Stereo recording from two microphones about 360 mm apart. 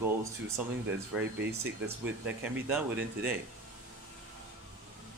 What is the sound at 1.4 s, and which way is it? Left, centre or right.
Speech, right.